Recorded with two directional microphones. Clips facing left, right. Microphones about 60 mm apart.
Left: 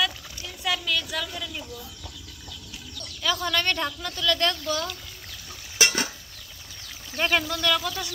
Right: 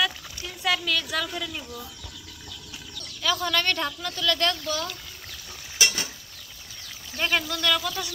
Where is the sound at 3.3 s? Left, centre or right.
Centre.